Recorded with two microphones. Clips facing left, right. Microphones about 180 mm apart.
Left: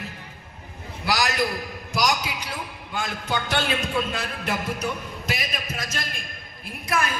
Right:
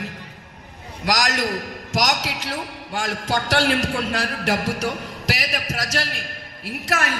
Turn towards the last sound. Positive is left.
turn(degrees=-85)